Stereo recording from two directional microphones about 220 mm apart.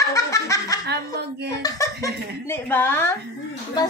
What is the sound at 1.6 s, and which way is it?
Speech, 15° left (ahead or behind).